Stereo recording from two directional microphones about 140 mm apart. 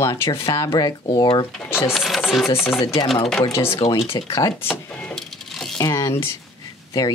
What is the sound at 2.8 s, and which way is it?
Speech, 35° left (ahead or behind).